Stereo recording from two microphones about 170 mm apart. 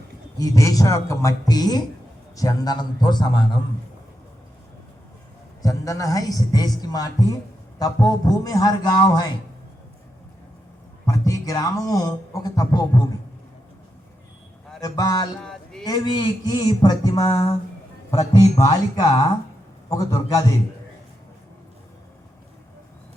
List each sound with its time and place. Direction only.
0.3 s a man's voice: 20° left (ahead or behind)
5.6 s a man's voice: 20° left (ahead or behind)
11.0 s a man's voice: 20° left (ahead or behind)
14.8 s a man's voice: 20° left (ahead or behind)
15.4 s a sound: 5° left (ahead or behind)
15.8 s a man's voice: 25° left (ahead or behind)